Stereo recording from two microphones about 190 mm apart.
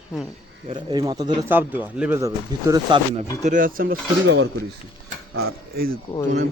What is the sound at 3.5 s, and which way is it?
Speech, 45° right (ahead or behind).